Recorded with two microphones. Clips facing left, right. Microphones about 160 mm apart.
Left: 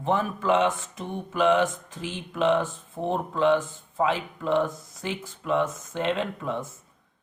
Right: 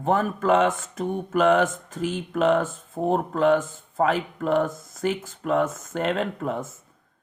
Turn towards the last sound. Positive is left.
turn(degrees=-45)  # may be behind; listen again after turning